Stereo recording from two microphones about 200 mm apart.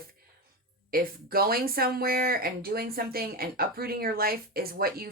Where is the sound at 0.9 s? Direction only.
50° right (ahead or behind).